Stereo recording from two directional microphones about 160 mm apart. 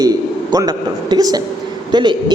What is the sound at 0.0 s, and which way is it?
A woman's voice, 20° right (ahead or behind).